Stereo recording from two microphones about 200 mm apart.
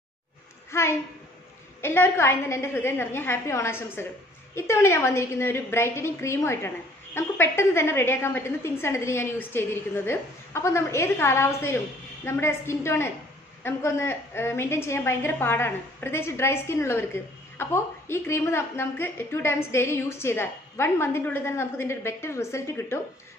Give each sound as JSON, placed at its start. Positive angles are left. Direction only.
{"t": 0.7, "sound": "a woman's voice", "side_deg": 15}